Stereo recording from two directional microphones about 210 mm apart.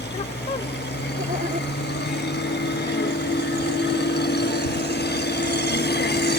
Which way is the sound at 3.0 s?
55° left (ahead or behind).